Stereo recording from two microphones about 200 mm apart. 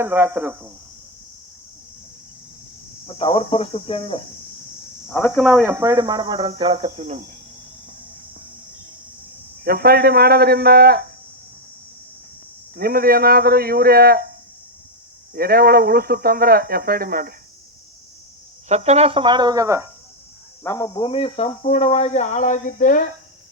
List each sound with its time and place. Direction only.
0.0 s speech: 10° right (ahead or behind)
3.1 s speech: 30° left (ahead or behind)
5.0 s speech: 10° left (ahead or behind)
5.4 s speech: centre (ahead or behind)
5.7 s speech: 15° right (ahead or behind); by 7.3 s 35° right (ahead or behind)
9.6 s speech: 50° right (ahead or behind)
12.7 s speech: 50° right (ahead or behind)
15.4 s speech: 50° right (ahead or behind)
18.7 s speech: 35° right (ahead or behind); by 19.9 s 15° right (ahead or behind)
20.7 s speech: 15° left (ahead or behind); by 23.0 s 40° left (ahead or behind)